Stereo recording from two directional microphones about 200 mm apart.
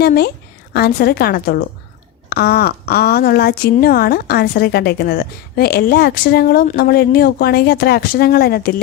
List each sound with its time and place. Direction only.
0.0 s speech: 50° left (ahead or behind)